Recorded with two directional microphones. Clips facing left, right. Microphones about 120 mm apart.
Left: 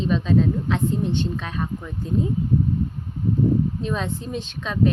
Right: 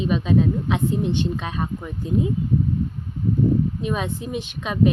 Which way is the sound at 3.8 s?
10° right (ahead or behind).